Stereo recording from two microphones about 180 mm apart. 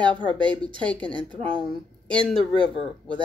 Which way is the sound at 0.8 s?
5° left (ahead or behind).